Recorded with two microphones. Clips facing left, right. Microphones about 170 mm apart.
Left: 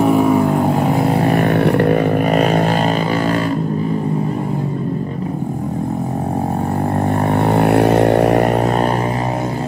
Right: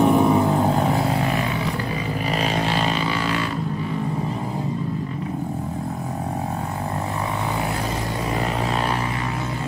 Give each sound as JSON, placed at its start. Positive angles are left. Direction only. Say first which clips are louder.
{"t": 0.0, "sound": "vehicle", "louder": "left 4 dB", "side_deg": 0}
{"t": 1.3, "sound": "a sound", "louder": "left 10 dB", "side_deg": 65}
{"t": 7.4, "sound": "vehicle", "louder": "left 13 dB", "side_deg": 65}